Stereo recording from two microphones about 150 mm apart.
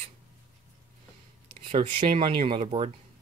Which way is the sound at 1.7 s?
35° right (ahead or behind).